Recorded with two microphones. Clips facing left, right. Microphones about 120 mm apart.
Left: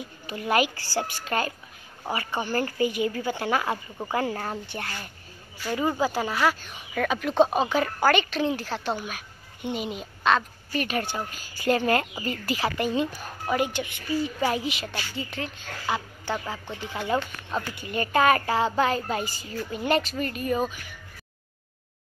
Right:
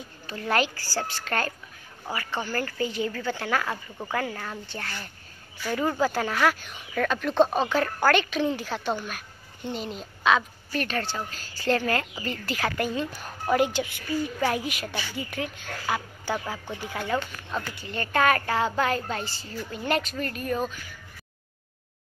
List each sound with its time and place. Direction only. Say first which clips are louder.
0.0 s a woman's voice: left 2 dB; 15° left (ahead or behind)
2.0 s a woman's voice: left 2 dB; 20° left (ahead or behind)
4.3 s speech: left 5 dB; 35° left (ahead or behind)
5.6 s speech: even; 5° left (ahead or behind)
11.0 s a woman's voice: left 1 dB; 15° left (ahead or behind)
12.3 s speech: left 1 dB; 5° left (ahead or behind)
17.0 s speech: left 3 dB; 10° left (ahead or behind)